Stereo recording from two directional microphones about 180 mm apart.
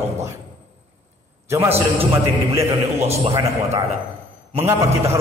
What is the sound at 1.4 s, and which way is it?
Speech, 15° right (ahead or behind).